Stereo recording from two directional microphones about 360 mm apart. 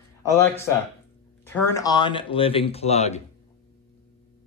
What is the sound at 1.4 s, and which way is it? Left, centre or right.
Speech, centre.